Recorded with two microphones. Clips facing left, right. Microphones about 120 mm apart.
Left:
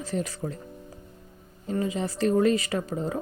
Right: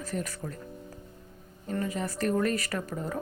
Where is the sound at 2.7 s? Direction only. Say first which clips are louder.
Left 5 dB; 25° left (ahead or behind).